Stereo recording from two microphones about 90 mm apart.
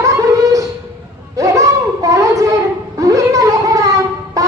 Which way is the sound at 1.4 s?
40° right (ahead or behind).